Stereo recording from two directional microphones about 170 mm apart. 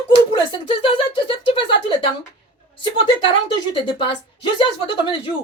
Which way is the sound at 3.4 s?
30° left (ahead or behind).